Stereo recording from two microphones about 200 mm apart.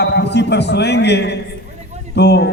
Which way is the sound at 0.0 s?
55° left (ahead or behind).